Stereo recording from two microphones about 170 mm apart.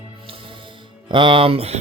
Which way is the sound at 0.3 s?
30° right (ahead or behind).